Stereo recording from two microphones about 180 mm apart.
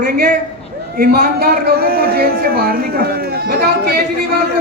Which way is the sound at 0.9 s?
55° right (ahead or behind).